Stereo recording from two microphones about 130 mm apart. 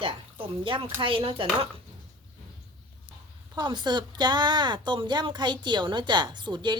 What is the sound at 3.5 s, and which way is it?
Speech, 35° right (ahead or behind).